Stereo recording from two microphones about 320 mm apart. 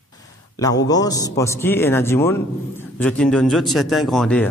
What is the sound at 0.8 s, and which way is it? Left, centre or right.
A man's voice, centre.